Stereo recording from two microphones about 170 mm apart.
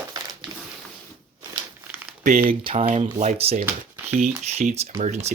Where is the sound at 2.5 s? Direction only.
35° right (ahead or behind).